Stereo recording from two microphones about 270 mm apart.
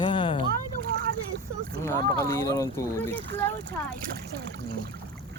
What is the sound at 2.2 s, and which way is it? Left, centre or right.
Speech, centre.